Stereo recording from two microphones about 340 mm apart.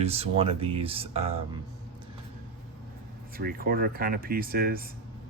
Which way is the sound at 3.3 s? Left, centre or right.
Right.